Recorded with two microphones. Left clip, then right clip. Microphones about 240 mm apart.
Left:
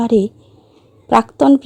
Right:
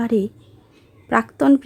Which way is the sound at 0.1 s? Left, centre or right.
Centre.